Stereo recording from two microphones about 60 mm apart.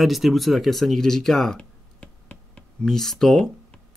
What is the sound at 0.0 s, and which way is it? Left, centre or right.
Speech, centre.